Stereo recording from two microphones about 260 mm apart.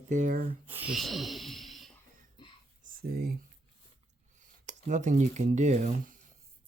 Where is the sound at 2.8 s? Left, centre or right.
Right.